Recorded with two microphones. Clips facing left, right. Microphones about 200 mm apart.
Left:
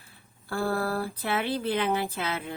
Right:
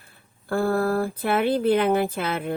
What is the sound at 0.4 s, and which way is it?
Speech, 50° right (ahead or behind).